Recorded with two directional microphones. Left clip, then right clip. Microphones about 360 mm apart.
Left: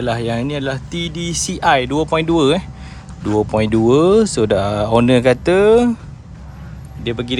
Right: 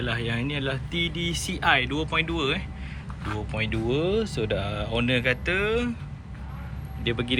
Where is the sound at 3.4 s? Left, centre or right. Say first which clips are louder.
Left 15 dB; left.